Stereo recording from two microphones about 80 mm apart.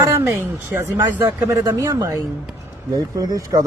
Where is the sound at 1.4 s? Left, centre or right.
Right.